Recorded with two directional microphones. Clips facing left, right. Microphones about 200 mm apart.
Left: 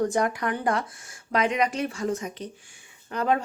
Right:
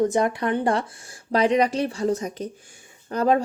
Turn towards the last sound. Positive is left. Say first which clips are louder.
# right 5 dB
turn(degrees=-35)  # may be behind; listen again after turning